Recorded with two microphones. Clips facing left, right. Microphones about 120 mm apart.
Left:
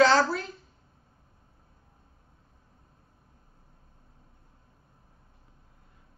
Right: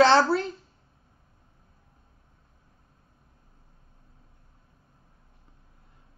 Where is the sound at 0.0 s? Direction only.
30° right (ahead or behind).